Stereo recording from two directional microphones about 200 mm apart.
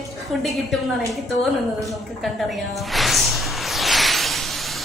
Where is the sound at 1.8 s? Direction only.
Centre (ahead or behind).